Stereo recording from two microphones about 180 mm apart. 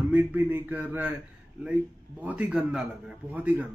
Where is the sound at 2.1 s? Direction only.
10° right (ahead or behind).